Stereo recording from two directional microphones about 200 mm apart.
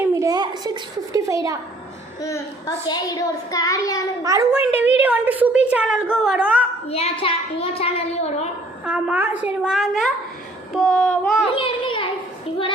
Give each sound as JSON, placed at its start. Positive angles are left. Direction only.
{"t": 0.0, "sound": "a woman's voice", "side_deg": -15}
{"t": 2.2, "sound": "a child's voice", "side_deg": 15}
{"t": 4.2, "sound": "a woman's voice", "side_deg": -15}
{"t": 6.9, "sound": "a child's voice", "side_deg": 30}
{"t": 8.8, "sound": "a woman's voice", "side_deg": -5}
{"t": 11.5, "sound": "a child's voice", "side_deg": 25}